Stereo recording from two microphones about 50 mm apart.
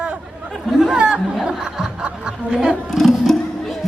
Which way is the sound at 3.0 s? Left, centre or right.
Centre.